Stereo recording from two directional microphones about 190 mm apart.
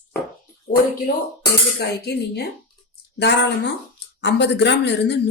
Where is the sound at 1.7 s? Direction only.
60° left (ahead or behind).